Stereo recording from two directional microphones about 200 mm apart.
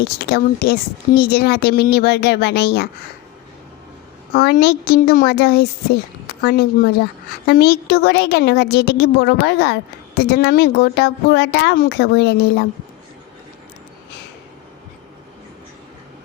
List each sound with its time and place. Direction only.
0.0 s speech: 50° left (ahead or behind)
4.4 s a woman's voice: 50° left (ahead or behind)